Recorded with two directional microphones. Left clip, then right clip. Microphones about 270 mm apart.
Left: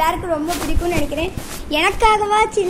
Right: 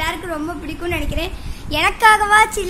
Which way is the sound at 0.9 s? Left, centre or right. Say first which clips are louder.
Even; centre.